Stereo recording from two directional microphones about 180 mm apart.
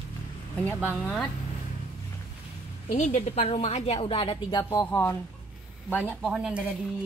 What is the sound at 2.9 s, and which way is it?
A woman's voice, 40° left (ahead or behind).